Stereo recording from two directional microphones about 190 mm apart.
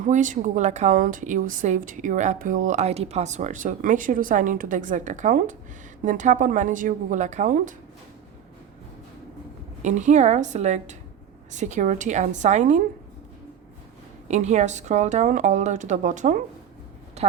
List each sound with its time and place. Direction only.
0.0 s a woman's voice: 40° right (ahead or behind)
9.8 s a woman's voice: 40° right (ahead or behind)
14.3 s a woman's voice: 35° right (ahead or behind)
17.2 s a sound: 35° right (ahead or behind)